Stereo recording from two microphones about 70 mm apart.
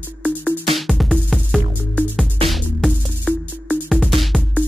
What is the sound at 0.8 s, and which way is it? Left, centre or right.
Music, centre.